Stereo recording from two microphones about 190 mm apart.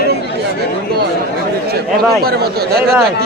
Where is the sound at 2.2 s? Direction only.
55° right (ahead or behind).